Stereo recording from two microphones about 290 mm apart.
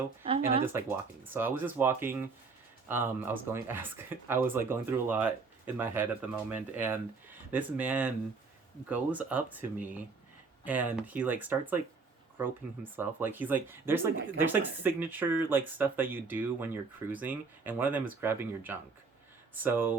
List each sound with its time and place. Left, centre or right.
0.3 s speech: centre
0.6 s speech: centre